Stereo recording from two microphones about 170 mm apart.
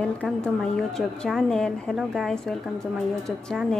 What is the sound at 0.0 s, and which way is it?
Speech, 5° left (ahead or behind).